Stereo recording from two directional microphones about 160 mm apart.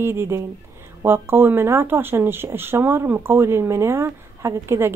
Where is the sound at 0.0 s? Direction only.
15° right (ahead or behind).